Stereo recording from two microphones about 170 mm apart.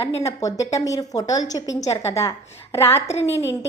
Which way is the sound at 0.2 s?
15° left (ahead or behind).